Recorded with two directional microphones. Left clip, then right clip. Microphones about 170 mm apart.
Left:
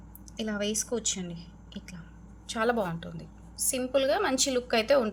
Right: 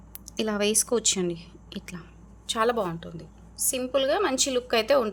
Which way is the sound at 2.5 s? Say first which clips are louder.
Right 3 dB; 25° right (ahead or behind).